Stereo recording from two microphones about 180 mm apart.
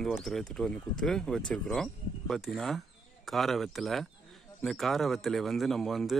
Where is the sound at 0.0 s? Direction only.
Centre (ahead or behind).